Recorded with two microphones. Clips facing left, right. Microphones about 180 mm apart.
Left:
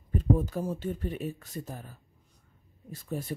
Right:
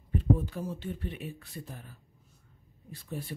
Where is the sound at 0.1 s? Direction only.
45° left (ahead or behind).